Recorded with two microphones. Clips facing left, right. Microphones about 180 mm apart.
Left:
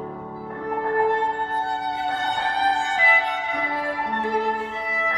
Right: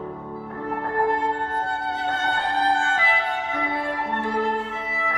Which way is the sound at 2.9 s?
15° left (ahead or behind).